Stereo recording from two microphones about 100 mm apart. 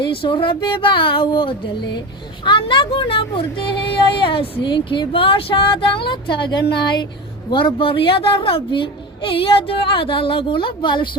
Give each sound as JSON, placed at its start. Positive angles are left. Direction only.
{"t": 0.0, "sound": "speech", "side_deg": 60}